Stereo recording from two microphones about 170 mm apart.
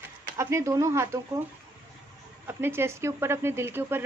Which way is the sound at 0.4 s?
15° right (ahead or behind).